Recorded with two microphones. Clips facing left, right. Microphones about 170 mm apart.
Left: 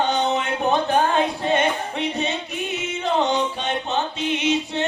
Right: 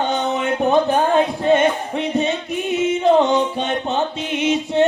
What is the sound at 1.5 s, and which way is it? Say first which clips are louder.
Music: right 6 dB; 50° right (ahead or behind).